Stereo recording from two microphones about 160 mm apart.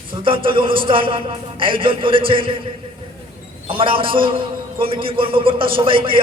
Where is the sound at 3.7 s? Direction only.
35° right (ahead or behind).